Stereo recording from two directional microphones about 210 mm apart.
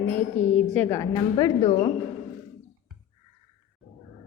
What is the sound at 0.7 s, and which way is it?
A woman's voice, 10° left (ahead or behind).